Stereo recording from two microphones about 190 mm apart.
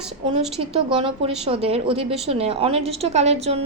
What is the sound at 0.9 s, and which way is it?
A woman's voice, 25° right (ahead or behind).